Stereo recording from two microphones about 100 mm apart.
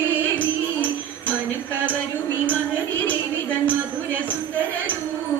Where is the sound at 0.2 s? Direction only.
15° left (ahead or behind).